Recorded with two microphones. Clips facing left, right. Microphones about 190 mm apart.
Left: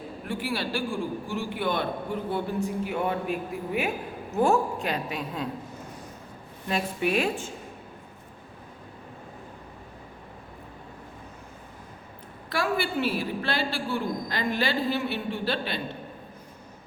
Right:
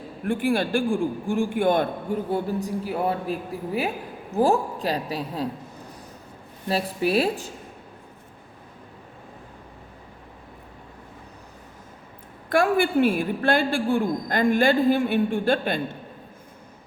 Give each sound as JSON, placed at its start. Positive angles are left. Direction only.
{"t": 0.3, "sound": "a man's voice", "side_deg": -50}
{"t": 6.7, "sound": "a man's voice", "side_deg": -35}
{"t": 12.5, "sound": "a woman's voice", "side_deg": -50}